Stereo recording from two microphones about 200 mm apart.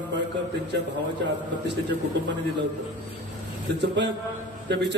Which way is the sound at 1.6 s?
60° right (ahead or behind).